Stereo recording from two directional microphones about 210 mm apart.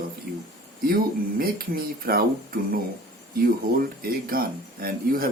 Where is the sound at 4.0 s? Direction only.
45° right (ahead or behind).